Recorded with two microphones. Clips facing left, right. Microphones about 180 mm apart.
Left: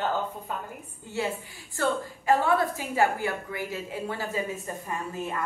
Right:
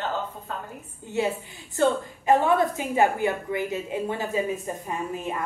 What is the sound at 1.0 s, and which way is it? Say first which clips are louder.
A woman's voice: right 4 dB; 20° right (ahead or behind).